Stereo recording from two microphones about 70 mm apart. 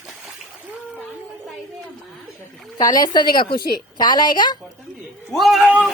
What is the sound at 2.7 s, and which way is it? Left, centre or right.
A woman's voice, left.